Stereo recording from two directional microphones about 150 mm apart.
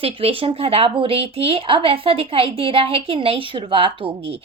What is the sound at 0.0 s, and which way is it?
A woman's voice, 40° right (ahead or behind).